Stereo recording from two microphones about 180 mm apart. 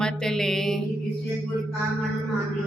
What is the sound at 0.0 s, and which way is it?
Music, 5° left (ahead or behind).